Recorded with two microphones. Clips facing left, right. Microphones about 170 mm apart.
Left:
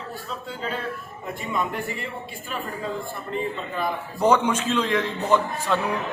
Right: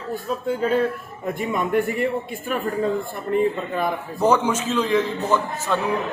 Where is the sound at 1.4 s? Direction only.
55° right (ahead or behind).